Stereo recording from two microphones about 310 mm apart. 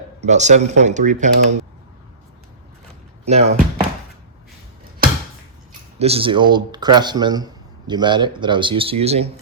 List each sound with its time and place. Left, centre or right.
0.3 s speech: right
3.2 s speech: right
6.0 s speech: centre